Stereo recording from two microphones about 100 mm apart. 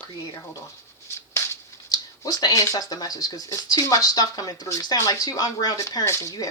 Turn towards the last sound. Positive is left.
turn(degrees=35)  # may be behind; listen again after turning